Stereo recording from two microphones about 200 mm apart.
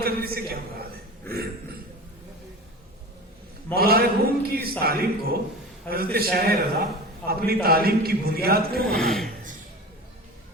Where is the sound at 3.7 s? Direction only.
50° right (ahead or behind).